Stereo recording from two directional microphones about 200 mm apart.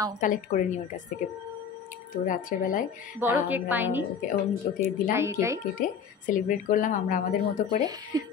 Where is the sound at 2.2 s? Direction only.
40° left (ahead or behind).